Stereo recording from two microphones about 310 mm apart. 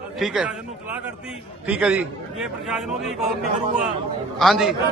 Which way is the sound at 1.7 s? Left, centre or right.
Centre.